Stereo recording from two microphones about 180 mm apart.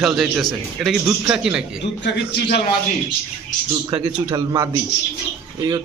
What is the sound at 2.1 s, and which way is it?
Speech, 70° left (ahead or behind).